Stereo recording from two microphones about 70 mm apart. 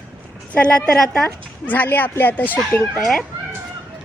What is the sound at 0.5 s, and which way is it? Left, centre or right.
Speech, centre.